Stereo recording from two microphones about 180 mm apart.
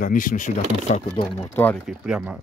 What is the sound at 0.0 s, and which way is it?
Speech, 50° left (ahead or behind).